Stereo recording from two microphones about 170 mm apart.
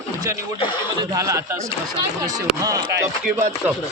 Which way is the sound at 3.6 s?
5° right (ahead or behind).